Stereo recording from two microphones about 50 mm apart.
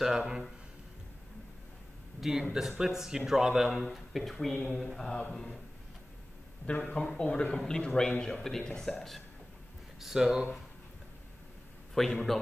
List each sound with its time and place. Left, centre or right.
0.0 s speech: centre
2.1 s speech: centre
6.6 s speech: left; by 9.2 s centre
9.9 s speech: centre
11.9 s speech: centre